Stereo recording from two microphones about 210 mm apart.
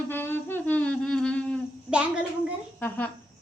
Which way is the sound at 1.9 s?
5° right (ahead or behind).